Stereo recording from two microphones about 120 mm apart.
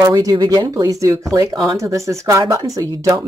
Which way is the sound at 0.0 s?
30° right (ahead or behind).